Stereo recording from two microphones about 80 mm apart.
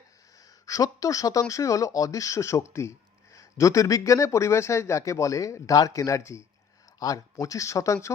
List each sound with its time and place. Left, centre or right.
0.6 s speech: left
7.0 s speech: left